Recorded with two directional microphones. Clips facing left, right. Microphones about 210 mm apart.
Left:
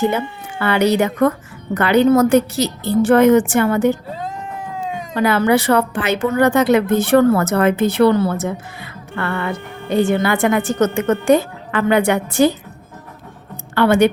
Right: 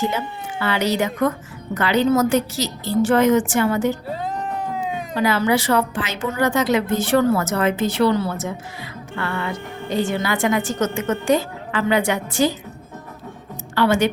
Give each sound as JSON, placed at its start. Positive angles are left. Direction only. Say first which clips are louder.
{"t": 0.6, "sound": "a woman's voice", "louder": "left 5 dB", "side_deg": 60}
{"t": 5.1, "sound": "a woman's voice", "louder": "left 4 dB", "side_deg": 55}
{"t": 13.7, "sound": "a woman's voice", "louder": "left 5 dB", "side_deg": 60}